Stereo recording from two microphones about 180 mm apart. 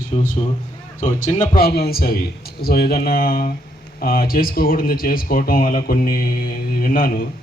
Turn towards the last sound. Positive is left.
turn(degrees=55)  # may be behind; listen again after turning